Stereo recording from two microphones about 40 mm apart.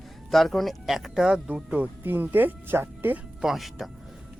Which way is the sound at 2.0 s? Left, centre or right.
Right.